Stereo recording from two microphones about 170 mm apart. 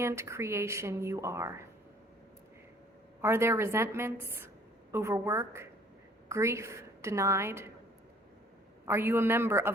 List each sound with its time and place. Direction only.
0.0 s speech: 15° right (ahead or behind)
3.2 s a woman's voice: 15° right (ahead or behind)
8.9 s speech: 15° right (ahead or behind)